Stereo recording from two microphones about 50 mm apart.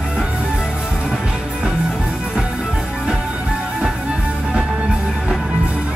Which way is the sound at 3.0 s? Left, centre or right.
Centre.